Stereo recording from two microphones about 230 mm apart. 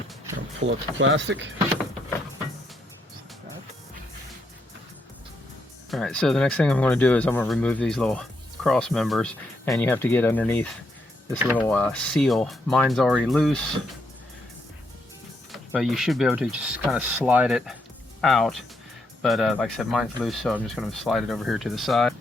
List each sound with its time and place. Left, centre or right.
0.6 s speech: right
5.9 s speech: centre
11.3 s speech: centre
11.6 s speech: centre
15.7 s speech: centre